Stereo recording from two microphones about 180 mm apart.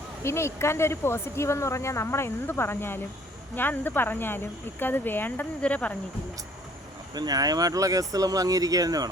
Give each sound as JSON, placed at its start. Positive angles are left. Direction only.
{"t": 0.2, "sound": "speech", "side_deg": 15}
{"t": 7.1, "sound": "speech", "side_deg": -20}